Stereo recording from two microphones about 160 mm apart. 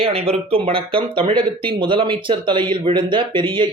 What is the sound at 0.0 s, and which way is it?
Speech, 35° right (ahead or behind).